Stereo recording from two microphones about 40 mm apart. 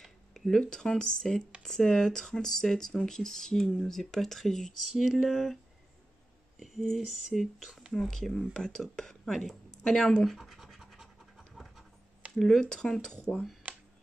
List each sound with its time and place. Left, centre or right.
0.3 s a sound: centre
0.7 s speech: centre
6.6 s speech: centre
7.9 s speech: centre
10.4 s scratch: centre
12.4 s speech: centre